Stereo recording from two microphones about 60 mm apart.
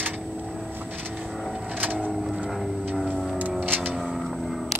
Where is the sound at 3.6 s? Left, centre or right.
Right.